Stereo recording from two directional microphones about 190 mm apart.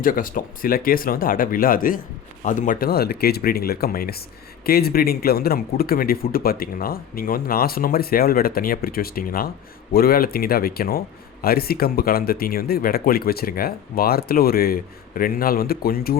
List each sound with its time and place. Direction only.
0.0 s speech: 45° left (ahead or behind)